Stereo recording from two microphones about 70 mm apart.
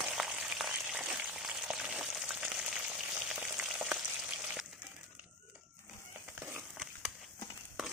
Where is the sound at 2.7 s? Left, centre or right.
Centre.